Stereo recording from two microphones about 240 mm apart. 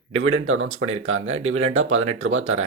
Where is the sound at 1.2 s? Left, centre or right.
Right.